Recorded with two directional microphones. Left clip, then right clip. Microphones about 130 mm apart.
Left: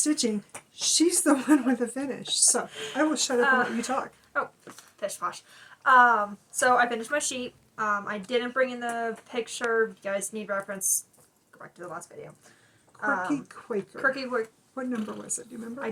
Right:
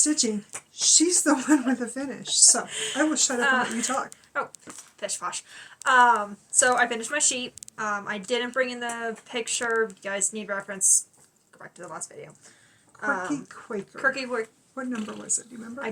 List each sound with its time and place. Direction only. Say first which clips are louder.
0.0 s a woman's voice: right 2 dB; 30° left (ahead or behind)
2.6 s a woman's voice: right 5 dB; 20° right (ahead or behind)
2.9 s speech: right 1 dB; 25° left (ahead or behind)
3.4 s a woman's voice: even; 20° right (ahead or behind)
3.8 s a woman's voice: right 1 dB; 30° left (ahead or behind)
4.3 s a woman's voice: even; 20° right (ahead or behind)
13.1 s a woman's voice: left 1 dB; 30° right (ahead or behind)
13.5 s a woman's voice: left 2 dB; 30° left (ahead or behind)
13.9 s a woman's voice: right 2 dB; 25° right (ahead or behind)
14.8 s a woman's voice: even; 35° left (ahead or behind)